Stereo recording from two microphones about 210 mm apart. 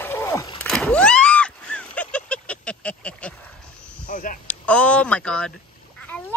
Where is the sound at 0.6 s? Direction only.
5° left (ahead or behind).